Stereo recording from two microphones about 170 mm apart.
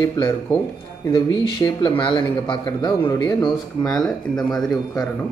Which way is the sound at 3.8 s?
5° left (ahead or behind).